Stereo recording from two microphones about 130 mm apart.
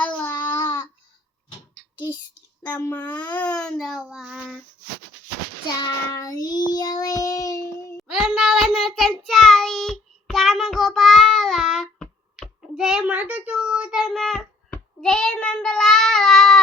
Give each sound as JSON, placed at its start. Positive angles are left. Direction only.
{"t": 0.0, "sound": "child singing", "side_deg": 10}
{"t": 0.5, "sound": "babbling", "side_deg": 35}
{"t": 2.8, "sound": "a child's voice", "side_deg": 15}
{"t": 5.6, "sound": "child singing", "side_deg": 30}
{"t": 8.0, "sound": "child singing", "side_deg": -5}